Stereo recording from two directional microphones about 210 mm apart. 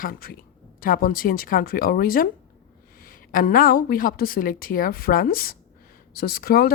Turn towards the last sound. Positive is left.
turn(degrees=45)  # may be behind; listen again after turning